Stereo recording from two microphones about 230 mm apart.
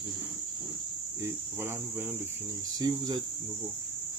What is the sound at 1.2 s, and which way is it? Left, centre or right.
Cricket, centre.